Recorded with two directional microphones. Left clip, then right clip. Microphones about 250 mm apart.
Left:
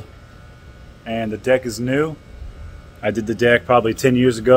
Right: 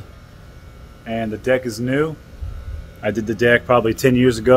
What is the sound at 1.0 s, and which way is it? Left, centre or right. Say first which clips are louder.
Speech: even; centre.